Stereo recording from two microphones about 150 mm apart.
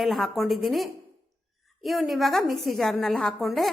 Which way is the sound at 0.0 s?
Centre (ahead or behind).